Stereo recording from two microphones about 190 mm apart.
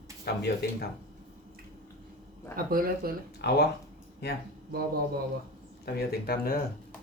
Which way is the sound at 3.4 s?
60° left (ahead or behind).